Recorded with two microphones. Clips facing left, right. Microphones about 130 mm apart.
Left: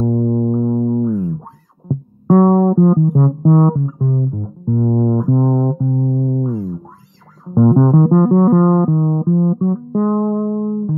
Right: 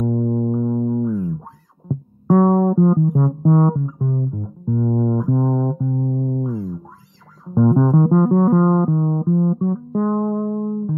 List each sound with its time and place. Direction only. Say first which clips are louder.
0.0 s music: left 4 dB; 35° left (ahead or behind)